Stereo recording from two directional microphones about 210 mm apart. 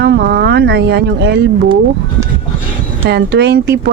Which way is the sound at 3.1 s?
50° right (ahead or behind).